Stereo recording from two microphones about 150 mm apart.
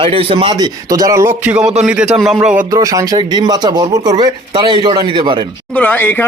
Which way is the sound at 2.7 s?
20° right (ahead or behind).